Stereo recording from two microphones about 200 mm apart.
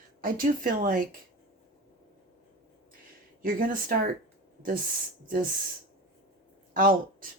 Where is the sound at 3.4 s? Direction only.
45° right (ahead or behind).